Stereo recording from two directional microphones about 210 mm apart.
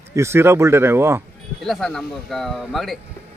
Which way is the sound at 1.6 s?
Centre (ahead or behind).